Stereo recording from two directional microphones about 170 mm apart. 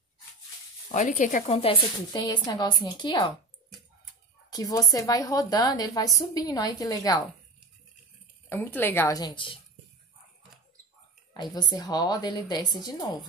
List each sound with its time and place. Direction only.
0.9 s speech: 45° left (ahead or behind)
1.5 s speech: 35° left (ahead or behind)
4.5 s speech: 20° left (ahead or behind)
8.5 s a woman's voice: 15° left (ahead or behind); by 9.6 s 30° left (ahead or behind)
11.5 s speech: 25° left (ahead or behind)